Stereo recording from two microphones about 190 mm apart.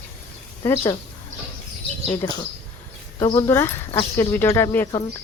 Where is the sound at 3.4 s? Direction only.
10° left (ahead or behind).